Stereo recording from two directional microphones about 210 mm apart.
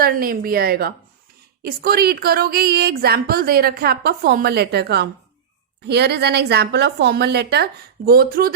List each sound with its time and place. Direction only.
0.0 s a woman's voice: 45° right (ahead or behind)